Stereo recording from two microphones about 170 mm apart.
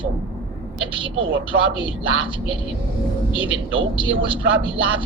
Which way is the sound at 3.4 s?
30° right (ahead or behind).